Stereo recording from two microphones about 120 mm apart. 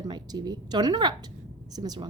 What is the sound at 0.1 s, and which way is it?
A woman's voice, 35° right (ahead or behind).